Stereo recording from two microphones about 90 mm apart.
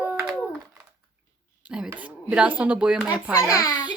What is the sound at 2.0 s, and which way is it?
Speech, 15° right (ahead or behind).